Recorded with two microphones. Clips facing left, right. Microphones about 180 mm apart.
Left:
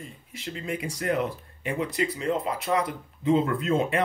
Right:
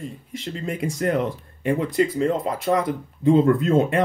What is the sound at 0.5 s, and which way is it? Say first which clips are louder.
Speech: right 5 dB; 45° right (ahead or behind).